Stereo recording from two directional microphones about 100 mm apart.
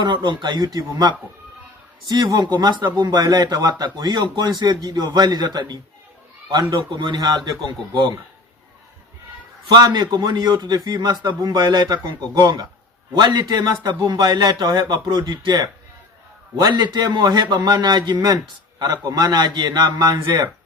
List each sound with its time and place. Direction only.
0.0 s a man's voice: 50° right (ahead or behind)
6.7 s a man's voice: 50° right (ahead or behind)
9.6 s a man's voice: 45° right (ahead or behind)
16.7 s a man's voice: 45° right (ahead or behind)